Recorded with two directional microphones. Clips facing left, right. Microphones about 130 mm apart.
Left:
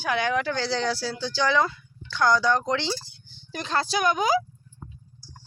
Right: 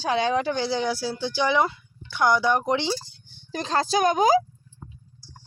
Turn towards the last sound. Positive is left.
turn(degrees=-40)  # may be behind; listen again after turning